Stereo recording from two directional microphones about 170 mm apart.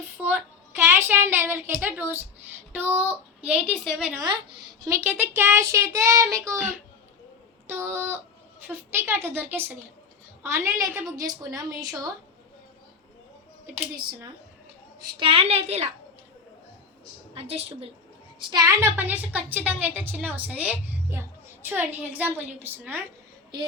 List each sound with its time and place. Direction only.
0.2 s a child's voice: 10° right (ahead or behind)
4.9 s a woman's voice: 15° right (ahead or behind)
6.6 s a child's voice: 5° right (ahead or behind)
7.7 s a woman's voice: 15° right (ahead or behind)
15.2 s a woman's voice: 35° right (ahead or behind)
17.3 s a woman's voice: 35° right (ahead or behind)
18.4 s a woman's voice: 20° right (ahead or behind)